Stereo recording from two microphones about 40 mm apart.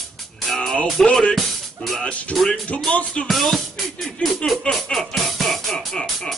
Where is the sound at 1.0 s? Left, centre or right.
Centre.